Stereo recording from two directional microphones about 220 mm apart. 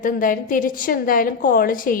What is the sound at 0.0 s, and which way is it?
A woman's voice, 40° left (ahead or behind).